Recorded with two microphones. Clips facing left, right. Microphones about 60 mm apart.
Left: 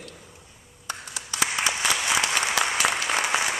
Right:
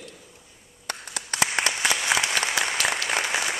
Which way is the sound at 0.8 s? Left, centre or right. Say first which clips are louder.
Right 1 dB; right.